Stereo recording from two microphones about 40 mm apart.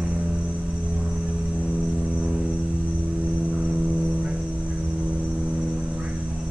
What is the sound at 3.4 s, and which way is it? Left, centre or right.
Cricket, right.